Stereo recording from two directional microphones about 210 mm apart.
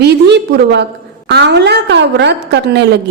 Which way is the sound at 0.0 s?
50° right (ahead or behind).